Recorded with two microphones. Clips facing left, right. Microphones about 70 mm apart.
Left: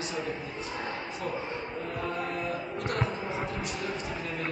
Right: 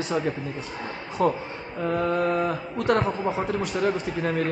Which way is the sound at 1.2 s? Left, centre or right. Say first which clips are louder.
Right 14 dB; right.